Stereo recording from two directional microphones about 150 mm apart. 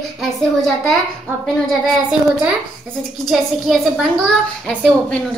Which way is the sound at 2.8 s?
Centre (ahead or behind).